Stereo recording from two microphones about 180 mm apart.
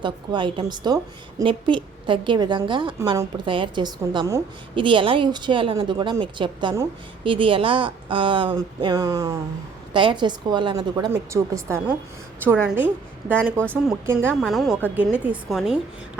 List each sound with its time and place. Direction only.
0.0 s a woman's voice: 25° right (ahead or behind); by 13.4 s 10° right (ahead or behind)
13.4 s speech: 5° left (ahead or behind)
14.1 s speech: 15° right (ahead or behind)
14.4 s a woman's voice: centre (ahead or behind)